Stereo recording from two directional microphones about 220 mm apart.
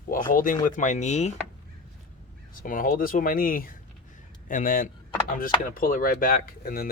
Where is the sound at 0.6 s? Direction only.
35° left (ahead or behind).